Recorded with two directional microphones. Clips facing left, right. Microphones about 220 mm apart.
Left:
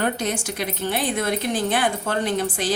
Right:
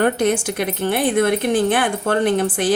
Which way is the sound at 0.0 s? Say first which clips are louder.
Right 7 dB; 55° right (ahead or behind).